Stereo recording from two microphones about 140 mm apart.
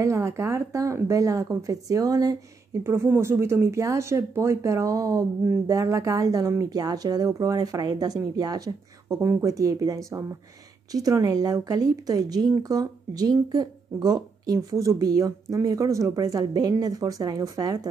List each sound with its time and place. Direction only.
0.0 s speech: 20° right (ahead or behind)